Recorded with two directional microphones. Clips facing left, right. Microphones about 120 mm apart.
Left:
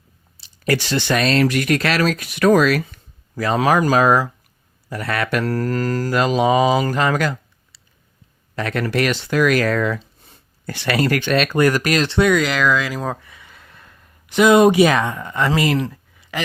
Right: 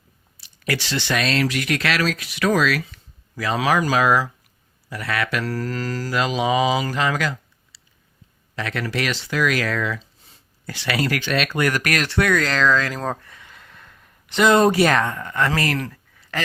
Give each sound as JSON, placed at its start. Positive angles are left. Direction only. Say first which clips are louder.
{"t": 0.6, "sound": "speech", "louder": "left 5 dB", "side_deg": 45}
{"t": 11.9, "sound": "speech", "louder": "left 4 dB", "side_deg": 25}